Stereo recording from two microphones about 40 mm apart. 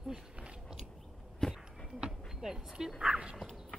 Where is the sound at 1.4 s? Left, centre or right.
Centre.